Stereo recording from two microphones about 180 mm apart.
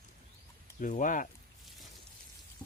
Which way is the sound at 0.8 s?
45° left (ahead or behind).